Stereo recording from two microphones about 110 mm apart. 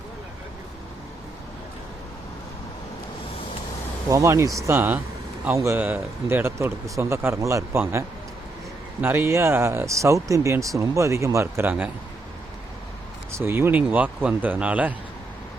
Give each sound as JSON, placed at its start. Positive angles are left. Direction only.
{"t": 4.1, "sound": "speech", "side_deg": -25}
{"t": 13.3, "sound": "speech", "side_deg": -20}